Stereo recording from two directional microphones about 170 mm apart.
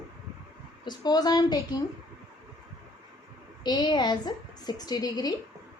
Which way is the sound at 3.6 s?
25° left (ahead or behind).